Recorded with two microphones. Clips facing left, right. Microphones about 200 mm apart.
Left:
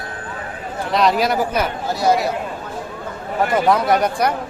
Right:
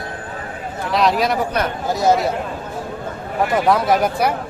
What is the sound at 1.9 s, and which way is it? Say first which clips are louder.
Speech: right 2 dB; 20° right (ahead or behind).